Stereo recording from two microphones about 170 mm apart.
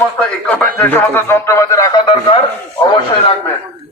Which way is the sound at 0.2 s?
10° left (ahead or behind).